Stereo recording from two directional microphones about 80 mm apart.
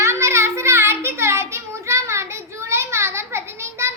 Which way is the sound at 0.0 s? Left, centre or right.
Right.